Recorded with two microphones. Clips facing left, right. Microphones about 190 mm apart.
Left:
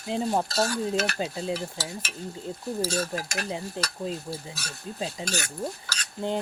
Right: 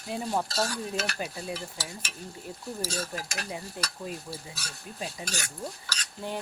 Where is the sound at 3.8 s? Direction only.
25° left (ahead or behind).